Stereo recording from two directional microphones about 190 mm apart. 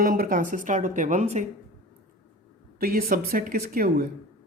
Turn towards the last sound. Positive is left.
turn(degrees=-50)  # may be behind; listen again after turning